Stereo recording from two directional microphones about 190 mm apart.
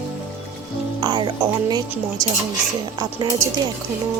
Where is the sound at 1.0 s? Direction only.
25° right (ahead or behind).